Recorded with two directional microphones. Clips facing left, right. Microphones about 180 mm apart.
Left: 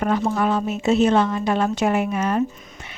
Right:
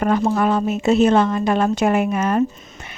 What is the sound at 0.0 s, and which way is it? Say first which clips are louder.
Speech: right 3 dB; 55° right (ahead or behind).